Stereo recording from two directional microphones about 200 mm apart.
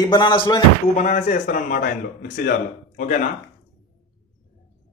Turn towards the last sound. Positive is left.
turn(degrees=40)  # may be behind; listen again after turning